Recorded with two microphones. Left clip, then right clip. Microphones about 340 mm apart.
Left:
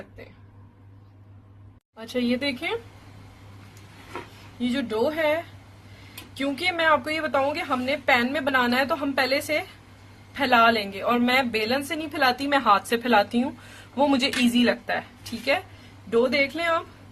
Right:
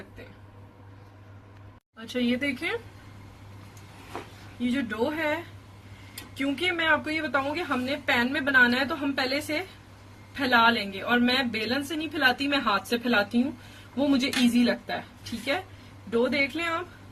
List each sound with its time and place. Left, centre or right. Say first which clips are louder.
2.0 s speech: left 2 dB; centre
4.6 s a woman's voice: left 3 dB; centre
14.1 s a woman's voice: left 2 dB; left
16.0 s speech: left 4 dB; centre